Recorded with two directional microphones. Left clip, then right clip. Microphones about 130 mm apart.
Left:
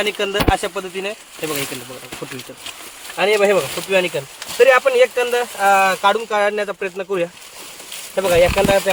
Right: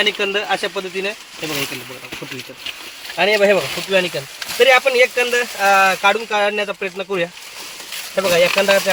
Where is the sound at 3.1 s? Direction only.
55° left (ahead or behind).